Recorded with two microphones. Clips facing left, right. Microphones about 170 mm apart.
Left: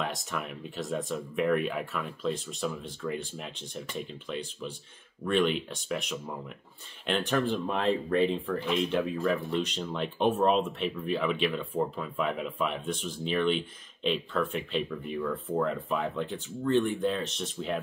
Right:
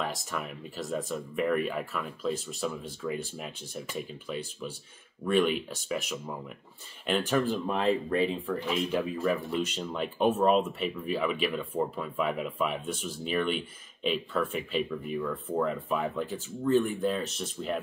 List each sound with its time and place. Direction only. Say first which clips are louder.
0.0 s speech: even; centre (ahead or behind)